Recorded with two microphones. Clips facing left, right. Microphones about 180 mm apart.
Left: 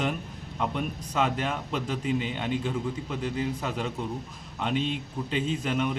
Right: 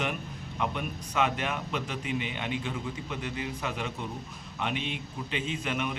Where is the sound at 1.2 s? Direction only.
35° left (ahead or behind).